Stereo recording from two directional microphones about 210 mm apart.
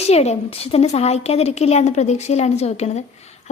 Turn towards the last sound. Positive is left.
turn(degrees=30)  # may be behind; listen again after turning